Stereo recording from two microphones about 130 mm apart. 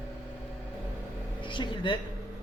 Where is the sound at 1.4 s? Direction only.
40° left (ahead or behind).